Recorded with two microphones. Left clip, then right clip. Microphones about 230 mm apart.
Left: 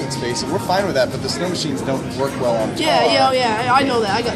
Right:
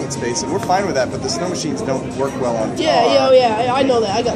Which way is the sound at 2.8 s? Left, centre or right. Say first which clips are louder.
Right 2 dB; left.